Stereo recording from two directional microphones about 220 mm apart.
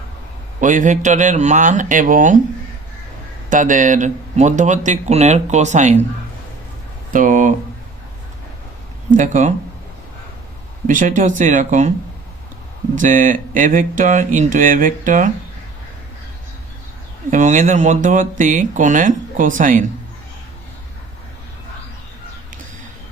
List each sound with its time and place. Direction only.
0.6 s speech: 35° right (ahead or behind)
3.5 s speech: 35° right (ahead or behind)
7.1 s speech: 35° right (ahead or behind)
9.1 s speech: 35° right (ahead or behind)
10.8 s speech: 35° right (ahead or behind)
13.0 s speech: 35° right (ahead or behind)
17.3 s speech: 35° right (ahead or behind)